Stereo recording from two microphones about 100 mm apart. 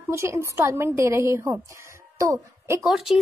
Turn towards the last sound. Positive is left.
turn(degrees=-5)  # may be behind; listen again after turning